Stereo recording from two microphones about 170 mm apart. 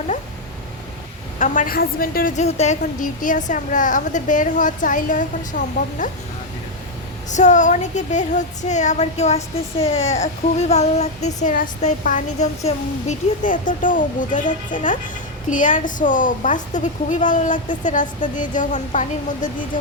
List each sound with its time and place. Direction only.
1.4 s speech: 55° left (ahead or behind)
7.3 s speech: 45° left (ahead or behind)